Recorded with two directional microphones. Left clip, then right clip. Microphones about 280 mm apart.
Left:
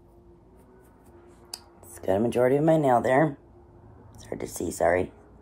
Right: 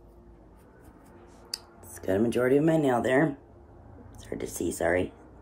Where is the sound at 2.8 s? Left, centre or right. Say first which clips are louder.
Left 3 dB; left.